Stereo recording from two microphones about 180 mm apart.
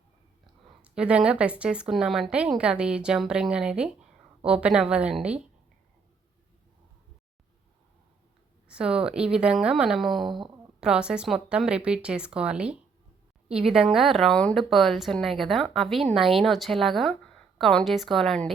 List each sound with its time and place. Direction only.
0.4 s a woman's voice: 5° right (ahead or behind)
8.6 s a woman's voice: 5° right (ahead or behind)
10.2 s speech: 25° right (ahead or behind)
10.8 s a woman's voice: 5° right (ahead or behind)